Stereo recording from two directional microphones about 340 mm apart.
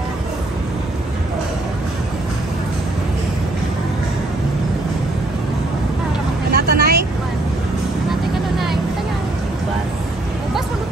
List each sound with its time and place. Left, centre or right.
6.5 s vehicle: right
8.1 s vehicle: centre